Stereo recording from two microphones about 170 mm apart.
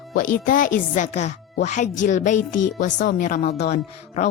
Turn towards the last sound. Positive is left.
turn(degrees=45)  # may be behind; listen again after turning